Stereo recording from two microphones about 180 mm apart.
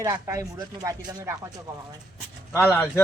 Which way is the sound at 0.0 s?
15° right (ahead or behind).